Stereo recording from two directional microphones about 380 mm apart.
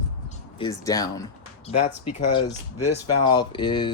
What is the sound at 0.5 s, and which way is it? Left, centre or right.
Speech, centre.